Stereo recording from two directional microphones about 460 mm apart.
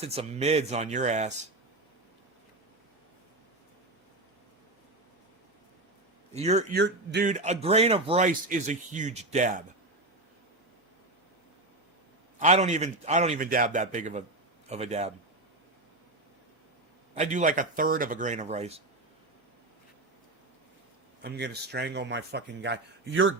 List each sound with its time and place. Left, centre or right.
0.0 s a man's voice: centre
6.3 s a man's voice: centre
12.4 s a man's voice: centre
17.2 s a man's voice: centre
21.2 s a man's voice: right